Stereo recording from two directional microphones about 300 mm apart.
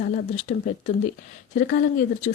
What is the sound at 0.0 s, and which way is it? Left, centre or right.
Speech, left.